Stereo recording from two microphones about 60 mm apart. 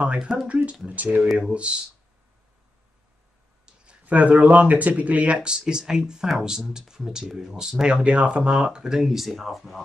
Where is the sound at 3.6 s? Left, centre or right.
Right.